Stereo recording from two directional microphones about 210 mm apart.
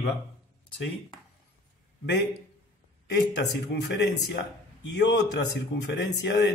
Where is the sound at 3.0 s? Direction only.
55° left (ahead or behind).